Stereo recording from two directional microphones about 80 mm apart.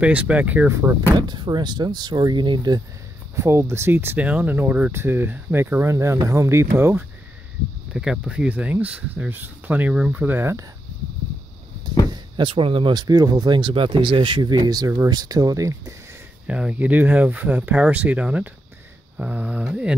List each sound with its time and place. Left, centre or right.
0.0 s speech: centre
0.7 s speech: right
1.1 s speech: right
3.3 s speech: right
7.9 s speech: centre; by 10.5 s right
12.1 s speech: right
16.4 s speech: centre